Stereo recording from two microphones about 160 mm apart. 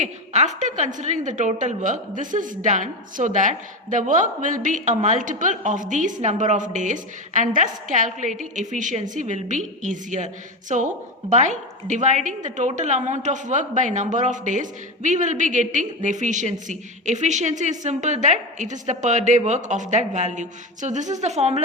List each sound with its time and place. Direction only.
0.0 s a woman's voice: 45° right (ahead or behind)